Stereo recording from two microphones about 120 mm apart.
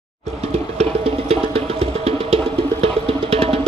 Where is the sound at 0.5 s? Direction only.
60° right (ahead or behind).